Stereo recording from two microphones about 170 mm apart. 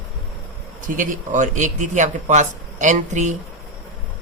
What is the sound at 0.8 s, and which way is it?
A man's voice, 50° right (ahead or behind).